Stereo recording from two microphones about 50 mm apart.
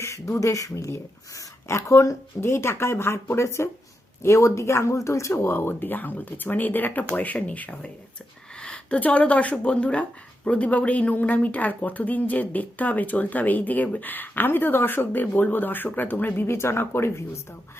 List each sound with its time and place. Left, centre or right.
0.0 s speech: left
2.4 s speech: left
5.5 s a woman's voice: left
8.6 s a sound: centre
9.0 s a woman's voice: left
16.6 s speech: left